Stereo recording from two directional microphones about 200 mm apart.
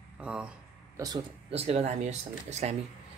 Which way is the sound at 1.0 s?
25° right (ahead or behind).